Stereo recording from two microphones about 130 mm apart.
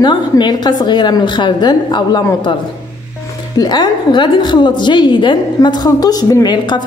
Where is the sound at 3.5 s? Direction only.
30° left (ahead or behind).